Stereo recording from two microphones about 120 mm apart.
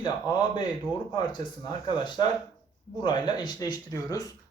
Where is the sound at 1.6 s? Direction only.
40° left (ahead or behind).